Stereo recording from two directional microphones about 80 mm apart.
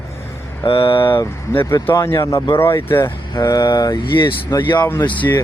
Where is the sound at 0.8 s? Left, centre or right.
Left.